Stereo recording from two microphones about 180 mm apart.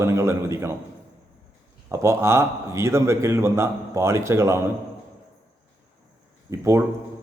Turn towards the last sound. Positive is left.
turn(degrees=-15)  # may be behind; listen again after turning